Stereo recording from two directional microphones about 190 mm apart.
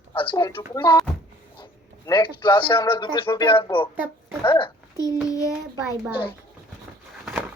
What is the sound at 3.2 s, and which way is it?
Speech, 15° left (ahead or behind).